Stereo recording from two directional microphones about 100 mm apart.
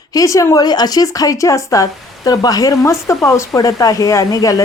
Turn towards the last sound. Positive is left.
turn(degrees=40)  # may be behind; listen again after turning